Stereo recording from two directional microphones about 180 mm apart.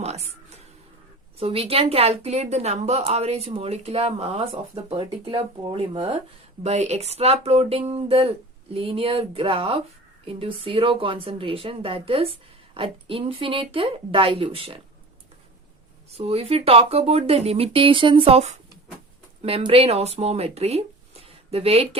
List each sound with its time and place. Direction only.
0.0 s a sound: 35° right (ahead or behind)
1.4 s a woman's voice: 30° right (ahead or behind)
16.0 s a woman's voice: 35° right (ahead or behind)